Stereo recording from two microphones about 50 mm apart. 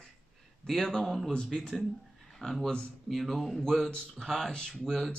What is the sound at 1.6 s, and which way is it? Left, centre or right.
Speech, centre.